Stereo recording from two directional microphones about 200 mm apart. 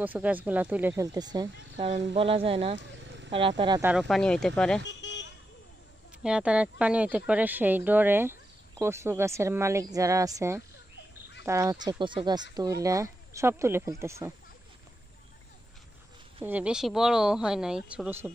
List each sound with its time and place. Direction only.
0.0 s speech: 10° right (ahead or behind); by 3.8 s 25° right (ahead or behind)
4.0 s speech: 5° left (ahead or behind)
4.8 s vehicle: 65° left (ahead or behind)
6.2 s speech: 5° right (ahead or behind)
16.4 s speech: 5° right (ahead or behind)